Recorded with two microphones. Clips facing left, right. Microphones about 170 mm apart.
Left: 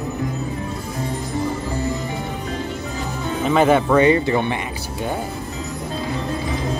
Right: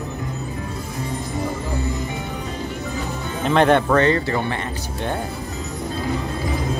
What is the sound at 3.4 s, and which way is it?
Speech, 5° left (ahead or behind).